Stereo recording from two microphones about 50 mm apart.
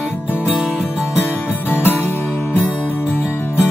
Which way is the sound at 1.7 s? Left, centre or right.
Left.